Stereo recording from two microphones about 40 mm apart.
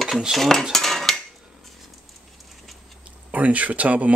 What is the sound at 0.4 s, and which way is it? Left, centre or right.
Cutlery, centre.